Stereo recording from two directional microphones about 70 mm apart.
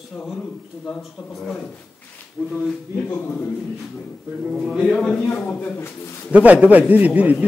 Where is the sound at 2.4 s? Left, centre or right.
Centre.